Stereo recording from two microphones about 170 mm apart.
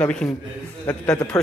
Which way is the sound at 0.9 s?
20° left (ahead or behind).